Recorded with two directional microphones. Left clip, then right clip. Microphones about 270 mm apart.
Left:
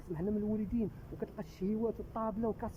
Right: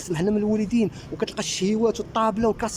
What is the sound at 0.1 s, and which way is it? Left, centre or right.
Speech, centre.